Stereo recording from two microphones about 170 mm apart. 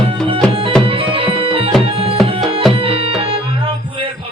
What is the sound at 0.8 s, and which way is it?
Music, 30° right (ahead or behind).